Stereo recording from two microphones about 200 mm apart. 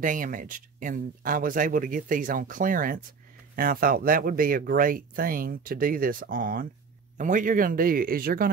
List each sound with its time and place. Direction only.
0.0 s speech: 40° right (ahead or behind)